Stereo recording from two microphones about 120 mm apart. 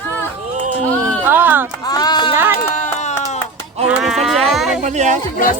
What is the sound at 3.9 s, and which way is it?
Speech, 5° right (ahead or behind).